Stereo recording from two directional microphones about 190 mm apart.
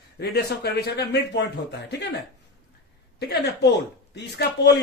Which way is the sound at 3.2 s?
60° left (ahead or behind).